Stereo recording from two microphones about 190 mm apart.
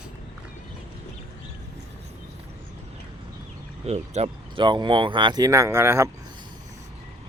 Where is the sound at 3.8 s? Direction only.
35° right (ahead or behind); by 6.1 s 15° right (ahead or behind).